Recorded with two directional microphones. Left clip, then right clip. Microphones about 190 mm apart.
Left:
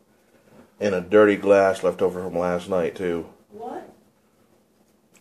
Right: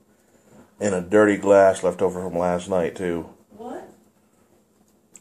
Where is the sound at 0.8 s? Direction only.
Centre (ahead or behind).